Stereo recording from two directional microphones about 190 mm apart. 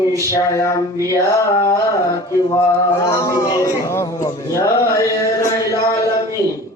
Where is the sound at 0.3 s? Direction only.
15° left (ahead or behind).